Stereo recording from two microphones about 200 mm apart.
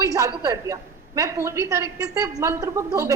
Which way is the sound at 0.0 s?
15° right (ahead or behind).